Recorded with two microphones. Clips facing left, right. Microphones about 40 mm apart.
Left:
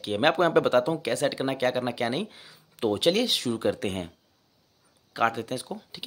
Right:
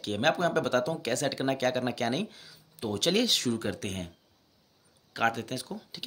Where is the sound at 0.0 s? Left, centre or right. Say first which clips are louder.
Left 5 dB; centre.